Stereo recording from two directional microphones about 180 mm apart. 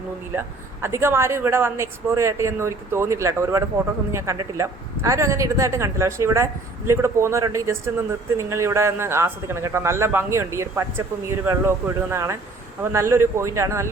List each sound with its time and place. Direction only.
0.3 s speech: 15° right (ahead or behind)